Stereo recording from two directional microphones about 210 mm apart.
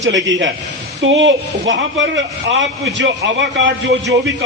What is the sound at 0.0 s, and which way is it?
A man's voice, 60° right (ahead or behind).